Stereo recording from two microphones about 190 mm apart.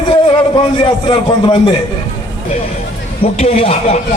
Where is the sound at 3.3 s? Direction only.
35° left (ahead or behind).